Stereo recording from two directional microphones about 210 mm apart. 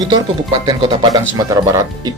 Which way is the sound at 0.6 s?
20° right (ahead or behind).